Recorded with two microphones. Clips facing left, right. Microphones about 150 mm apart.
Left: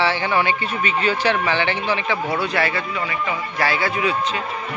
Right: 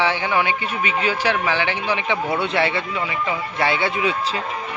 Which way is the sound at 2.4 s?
25° right (ahead or behind).